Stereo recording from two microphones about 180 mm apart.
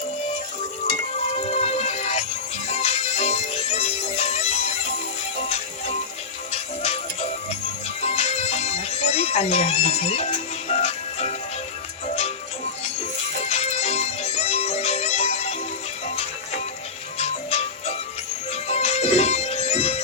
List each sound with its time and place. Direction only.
1.3 s music: 35° left (ahead or behind)
13.4 s music: 35° left (ahead or behind)